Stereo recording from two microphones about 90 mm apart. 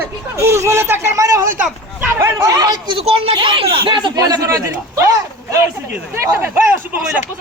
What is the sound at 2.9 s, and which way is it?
Speech, 85° right.